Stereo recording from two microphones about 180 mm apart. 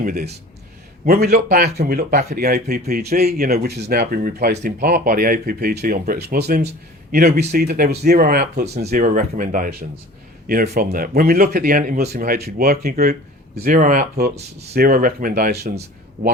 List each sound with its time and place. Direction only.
0.0 s speech: 55° right (ahead or behind)
8.6 s speech: 35° right (ahead or behind); by 13.1 s 60° right (ahead or behind)
13.7 s speech: 45° right (ahead or behind)
14.7 s speech: 55° right (ahead or behind)